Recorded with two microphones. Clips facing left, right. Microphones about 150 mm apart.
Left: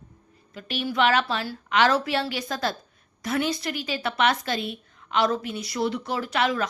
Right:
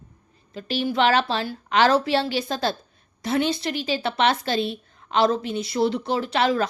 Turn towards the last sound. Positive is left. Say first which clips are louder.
# right 3 dB
turn(degrees=-30)  # may be behind; listen again after turning